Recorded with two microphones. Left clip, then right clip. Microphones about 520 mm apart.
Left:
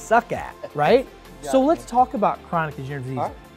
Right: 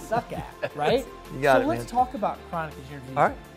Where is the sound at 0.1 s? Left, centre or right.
Left.